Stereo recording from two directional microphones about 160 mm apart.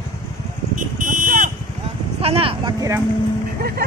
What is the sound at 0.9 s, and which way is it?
Vehicle, 55° right (ahead or behind).